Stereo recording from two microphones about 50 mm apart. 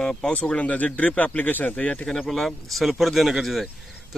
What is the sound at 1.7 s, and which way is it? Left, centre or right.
Speech, centre.